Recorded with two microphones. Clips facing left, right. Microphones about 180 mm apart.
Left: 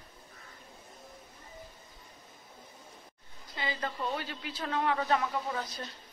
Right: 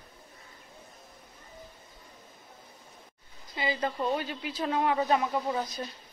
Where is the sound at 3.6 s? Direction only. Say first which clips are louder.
Right 5 dB; 15° right (ahead or behind).